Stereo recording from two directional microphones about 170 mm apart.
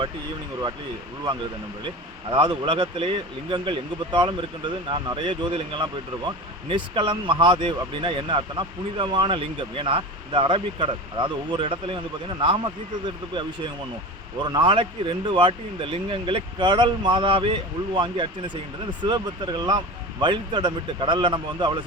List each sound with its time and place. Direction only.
2.3 s speech: 30° right (ahead or behind)
14.4 s speech: 25° right (ahead or behind)